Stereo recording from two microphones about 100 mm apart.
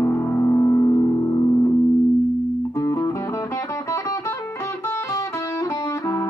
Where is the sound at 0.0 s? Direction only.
30° left (ahead or behind).